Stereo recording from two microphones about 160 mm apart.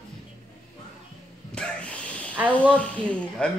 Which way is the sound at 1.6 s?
5° left (ahead or behind).